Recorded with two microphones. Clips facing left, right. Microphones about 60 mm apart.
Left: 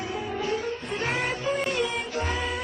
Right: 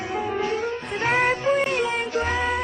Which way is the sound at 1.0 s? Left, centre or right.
Right.